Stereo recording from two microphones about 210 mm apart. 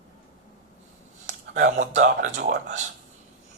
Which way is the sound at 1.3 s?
35° right (ahead or behind).